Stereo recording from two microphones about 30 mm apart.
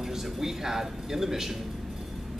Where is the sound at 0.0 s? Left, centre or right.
Centre.